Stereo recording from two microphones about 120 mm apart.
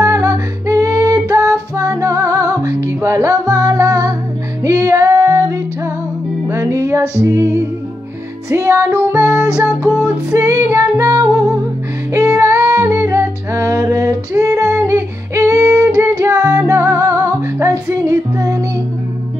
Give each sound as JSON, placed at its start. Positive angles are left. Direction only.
{"t": 0.0, "sound": "female singing", "side_deg": -25}
{"t": 1.8, "sound": "music", "side_deg": -25}
{"t": 9.7, "sound": "music", "side_deg": 20}
{"t": 10.0, "sound": "music", "side_deg": -25}